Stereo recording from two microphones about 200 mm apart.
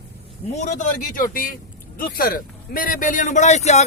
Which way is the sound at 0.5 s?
35° left (ahead or behind).